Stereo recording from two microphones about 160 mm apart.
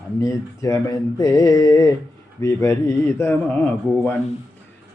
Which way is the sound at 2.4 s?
20° left (ahead or behind).